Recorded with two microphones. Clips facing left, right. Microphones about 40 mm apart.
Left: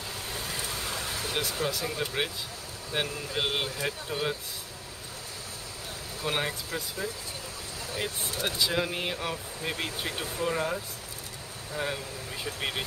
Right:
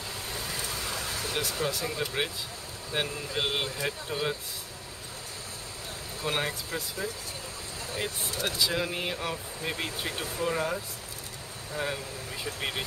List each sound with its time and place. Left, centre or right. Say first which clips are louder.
0.3 s a sound: even; centre
2.9 s speech: even; centre
6.2 s speech: even; centre